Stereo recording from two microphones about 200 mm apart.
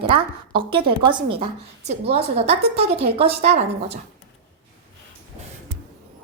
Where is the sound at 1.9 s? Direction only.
30° right (ahead or behind).